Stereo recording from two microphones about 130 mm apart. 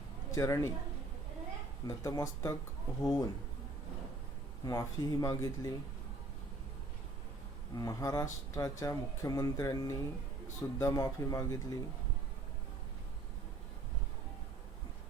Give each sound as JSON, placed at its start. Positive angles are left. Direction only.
{"t": 0.3, "sound": "speech", "side_deg": 20}
{"t": 1.9, "sound": "speech", "side_deg": 25}
{"t": 4.6, "sound": "speech", "side_deg": 30}
{"t": 7.8, "sound": "speech", "side_deg": 25}